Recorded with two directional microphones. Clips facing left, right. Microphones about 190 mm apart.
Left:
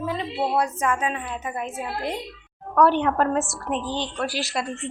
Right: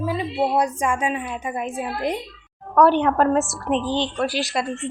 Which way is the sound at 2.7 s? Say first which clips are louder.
Right 3 dB; 35° right (ahead or behind).